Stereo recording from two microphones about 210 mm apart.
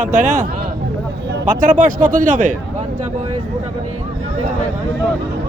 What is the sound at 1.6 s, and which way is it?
Speech, 40° right (ahead or behind).